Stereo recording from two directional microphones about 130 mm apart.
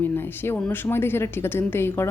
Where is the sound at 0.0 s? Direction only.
15° left (ahead or behind).